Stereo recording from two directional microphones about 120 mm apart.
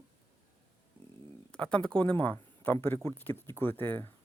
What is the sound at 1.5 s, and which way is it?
Speech, 10° left (ahead or behind).